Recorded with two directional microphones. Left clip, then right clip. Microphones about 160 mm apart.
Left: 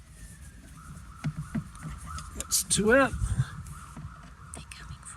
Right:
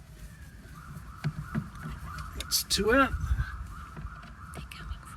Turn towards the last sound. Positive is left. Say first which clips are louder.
# right 1 dB
turn(degrees=-20)  # may be behind; listen again after turning